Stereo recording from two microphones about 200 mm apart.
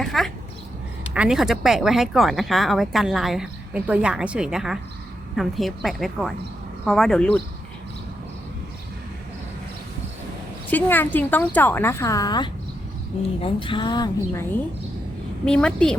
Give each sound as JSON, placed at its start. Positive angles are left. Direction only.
{"t": 0.0, "sound": "a sound", "side_deg": 0}
{"t": 1.1, "sound": "speech", "side_deg": -5}
{"t": 10.7, "sound": "a woman's voice", "side_deg": 10}
{"t": 15.4, "sound": "speech", "side_deg": 5}